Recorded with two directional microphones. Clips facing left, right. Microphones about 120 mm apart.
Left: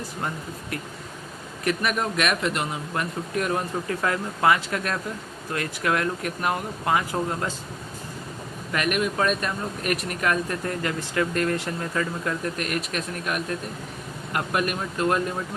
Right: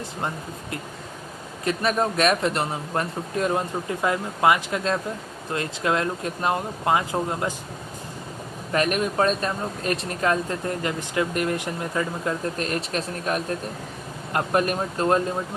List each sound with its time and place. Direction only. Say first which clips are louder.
1.6 s speech: right 2 dB; 30° right (ahead or behind)
8.7 s speech: right 2 dB; 35° right (ahead or behind)